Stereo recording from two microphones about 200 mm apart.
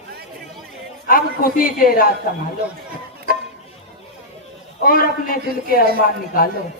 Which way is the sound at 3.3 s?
45° left (ahead or behind).